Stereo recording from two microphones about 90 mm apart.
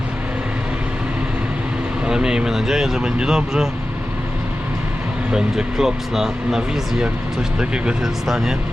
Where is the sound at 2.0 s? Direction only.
10° right (ahead or behind).